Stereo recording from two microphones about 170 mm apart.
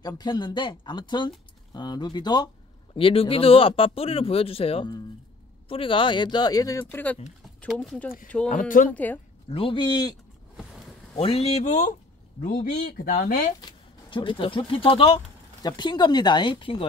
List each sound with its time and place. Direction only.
0.0 s speech: 25° left (ahead or behind); by 8.1 s centre (ahead or behind)
8.5 s speech: 50° left (ahead or behind)
8.9 s a woman's voice: 10° left (ahead or behind)
9.5 s speech: 30° left (ahead or behind)
11.1 s speech: 35° left (ahead or behind)
12.4 s speech: 60° left (ahead or behind)
13.6 s speech: 25° left (ahead or behind)